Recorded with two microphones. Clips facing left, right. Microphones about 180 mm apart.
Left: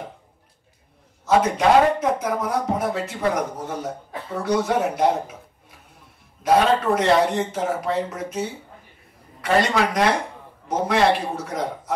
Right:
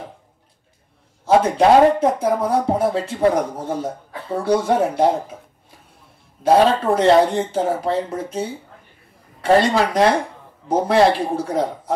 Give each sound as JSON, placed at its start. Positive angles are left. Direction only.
{"t": 1.2, "sound": "a man's voice", "side_deg": -30}
{"t": 6.4, "sound": "a man's voice", "side_deg": -30}